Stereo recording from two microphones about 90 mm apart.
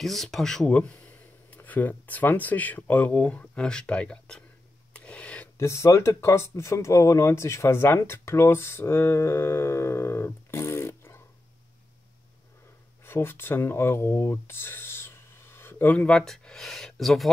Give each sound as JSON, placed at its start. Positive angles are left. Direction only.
{"t": 0.0, "sound": "speech", "side_deg": 0}
{"t": 4.9, "sound": "a sound", "side_deg": 15}
{"t": 5.6, "sound": "speech", "side_deg": 35}
{"t": 13.0, "sound": "speech", "side_deg": 25}